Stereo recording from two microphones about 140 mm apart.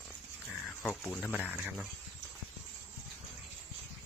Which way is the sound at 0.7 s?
5° left (ahead or behind).